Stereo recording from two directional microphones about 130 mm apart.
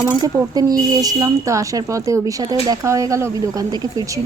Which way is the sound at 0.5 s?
30° right (ahead or behind).